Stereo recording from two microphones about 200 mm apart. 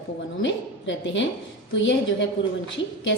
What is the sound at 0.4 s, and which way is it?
A woman's voice, 65° left (ahead or behind).